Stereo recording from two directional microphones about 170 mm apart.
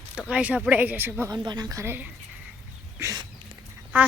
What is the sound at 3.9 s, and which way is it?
Speech, 10° right (ahead or behind).